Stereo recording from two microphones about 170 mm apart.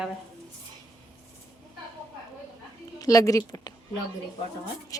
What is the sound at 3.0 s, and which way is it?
Speech, 20° left (ahead or behind).